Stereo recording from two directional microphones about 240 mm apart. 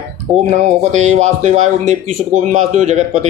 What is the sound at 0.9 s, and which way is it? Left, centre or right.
A man's voice, right.